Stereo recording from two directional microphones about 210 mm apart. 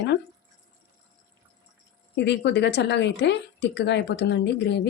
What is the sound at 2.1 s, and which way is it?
Speech, 55° left (ahead or behind).